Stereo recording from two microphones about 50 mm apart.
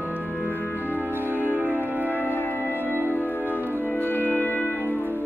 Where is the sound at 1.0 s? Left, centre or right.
Right.